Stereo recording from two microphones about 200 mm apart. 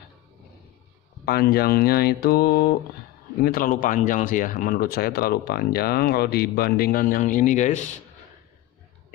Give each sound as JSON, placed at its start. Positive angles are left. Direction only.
{"t": 1.2, "sound": "speech", "side_deg": 50}